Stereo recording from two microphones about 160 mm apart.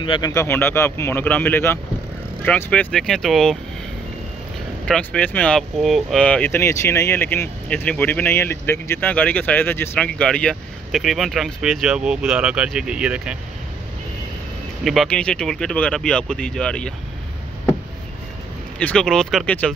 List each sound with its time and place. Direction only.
0.0 s speech: 30° left (ahead or behind)
0.3 s speech: 15° left (ahead or behind)
4.8 s speech: 5° left (ahead or behind)
14.8 s speech: centre (ahead or behind)
18.8 s speech: 5° left (ahead or behind)